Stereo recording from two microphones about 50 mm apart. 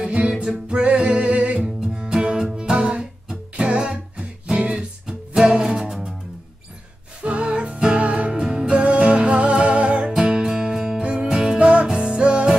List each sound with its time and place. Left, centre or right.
0.0 s music: centre
4.7 s music: centre
7.2 s music: right